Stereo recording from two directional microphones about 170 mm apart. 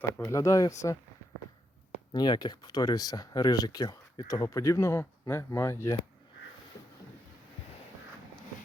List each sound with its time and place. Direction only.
0.2 s speech: 20° left (ahead or behind)
2.1 s speech: 25° left (ahead or behind)